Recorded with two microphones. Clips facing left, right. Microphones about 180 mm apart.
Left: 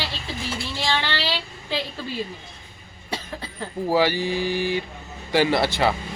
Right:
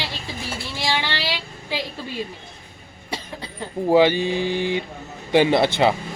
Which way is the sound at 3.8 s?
20° right (ahead or behind).